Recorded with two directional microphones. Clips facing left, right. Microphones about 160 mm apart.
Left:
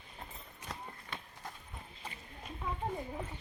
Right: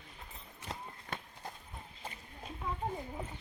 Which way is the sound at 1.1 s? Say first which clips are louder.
Right 4 dB; 45° right (ahead or behind).